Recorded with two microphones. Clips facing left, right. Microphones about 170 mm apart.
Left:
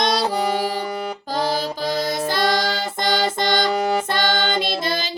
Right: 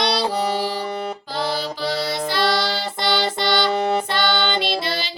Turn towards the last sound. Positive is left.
turn(degrees=45)  # may be behind; listen again after turning